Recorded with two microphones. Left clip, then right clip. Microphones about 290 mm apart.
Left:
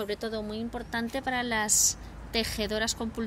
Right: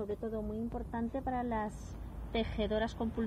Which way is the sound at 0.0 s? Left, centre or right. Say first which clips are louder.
Left 6 dB; centre.